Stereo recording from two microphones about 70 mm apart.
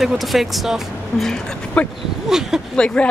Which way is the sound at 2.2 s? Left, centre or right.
Centre.